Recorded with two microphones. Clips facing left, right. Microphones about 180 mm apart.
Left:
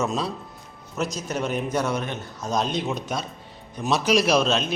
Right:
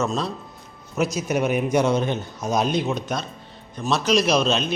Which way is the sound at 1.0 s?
10° right (ahead or behind).